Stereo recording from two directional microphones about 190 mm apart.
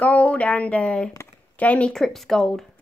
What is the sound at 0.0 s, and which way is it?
Speech, 5° left (ahead or behind).